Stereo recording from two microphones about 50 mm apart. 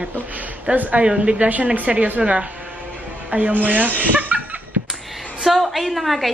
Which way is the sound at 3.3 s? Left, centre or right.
Right.